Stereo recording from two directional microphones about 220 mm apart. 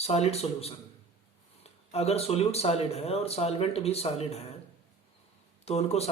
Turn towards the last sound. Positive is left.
turn(degrees=30)  # may be behind; listen again after turning